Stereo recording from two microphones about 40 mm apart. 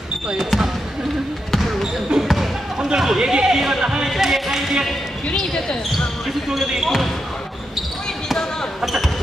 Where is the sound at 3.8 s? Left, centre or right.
Centre.